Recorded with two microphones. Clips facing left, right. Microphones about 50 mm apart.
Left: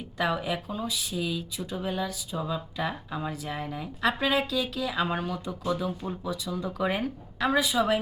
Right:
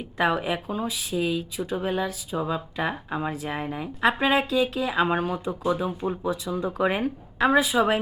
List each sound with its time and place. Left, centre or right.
0.2 s speech: right